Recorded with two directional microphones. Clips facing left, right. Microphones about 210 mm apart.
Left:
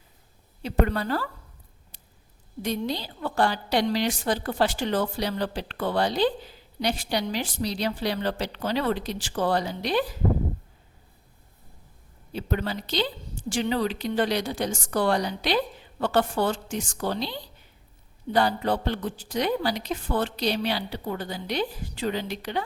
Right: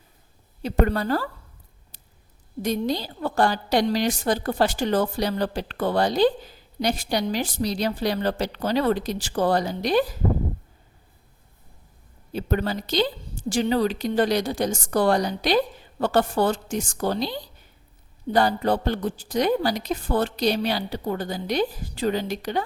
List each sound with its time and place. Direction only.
0.6 s a woman's voice: 45° right (ahead or behind)
2.6 s a woman's voice: 45° right (ahead or behind)
12.3 s a woman's voice: 45° right (ahead or behind)